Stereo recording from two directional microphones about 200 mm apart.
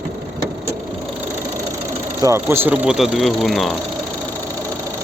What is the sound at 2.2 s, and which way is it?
Speech, 15° right (ahead or behind).